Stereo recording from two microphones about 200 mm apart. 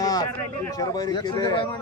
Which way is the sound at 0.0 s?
20° left (ahead or behind).